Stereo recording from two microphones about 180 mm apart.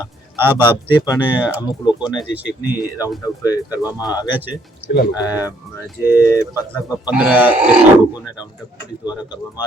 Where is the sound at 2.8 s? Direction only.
20° left (ahead or behind).